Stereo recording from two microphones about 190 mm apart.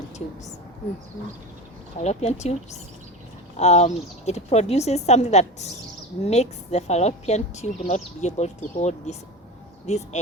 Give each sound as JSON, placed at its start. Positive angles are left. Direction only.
{"t": 2.0, "sound": "a woman's voice", "side_deg": 35}
{"t": 3.6, "sound": "a woman's voice", "side_deg": 35}